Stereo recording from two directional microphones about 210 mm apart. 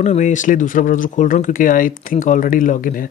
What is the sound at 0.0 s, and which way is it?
Speech, 35° left (ahead or behind).